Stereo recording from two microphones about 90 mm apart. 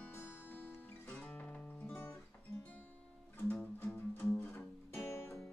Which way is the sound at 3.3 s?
20° left (ahead or behind).